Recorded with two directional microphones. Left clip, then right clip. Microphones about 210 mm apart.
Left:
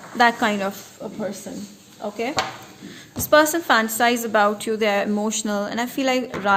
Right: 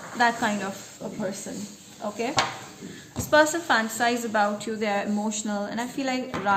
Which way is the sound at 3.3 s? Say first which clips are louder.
Left 4 dB; 50° left (ahead or behind).